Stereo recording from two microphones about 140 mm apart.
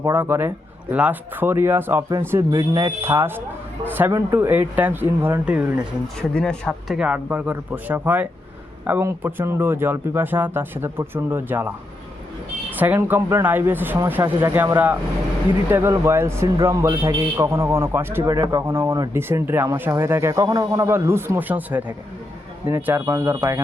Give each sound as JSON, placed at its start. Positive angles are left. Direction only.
{"t": 0.0, "sound": "speech", "side_deg": -15}
{"t": 6.1, "sound": "speech", "side_deg": 5}
{"t": 12.7, "sound": "a man's voice", "side_deg": -10}